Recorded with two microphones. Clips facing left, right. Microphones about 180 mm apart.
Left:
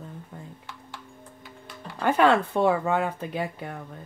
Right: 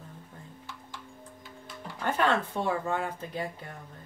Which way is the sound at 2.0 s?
65° left (ahead or behind).